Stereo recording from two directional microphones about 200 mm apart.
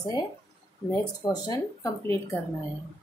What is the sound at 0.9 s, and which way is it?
Speech, 20° left (ahead or behind).